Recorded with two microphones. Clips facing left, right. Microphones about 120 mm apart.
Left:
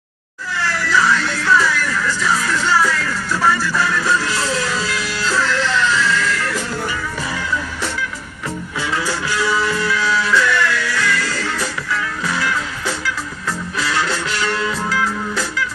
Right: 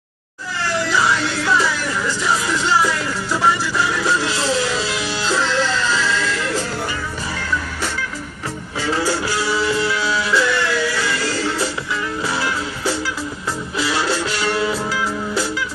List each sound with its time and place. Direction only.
0.6 s music: 25° right (ahead or behind)
8.7 s music: 35° right (ahead or behind)